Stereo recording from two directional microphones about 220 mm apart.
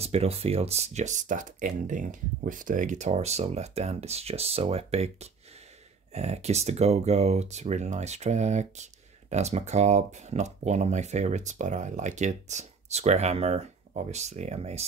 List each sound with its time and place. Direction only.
0.0 s speech: 30° right (ahead or behind)